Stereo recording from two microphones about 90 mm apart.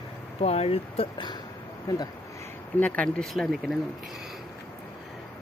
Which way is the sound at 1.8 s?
45° left (ahead or behind).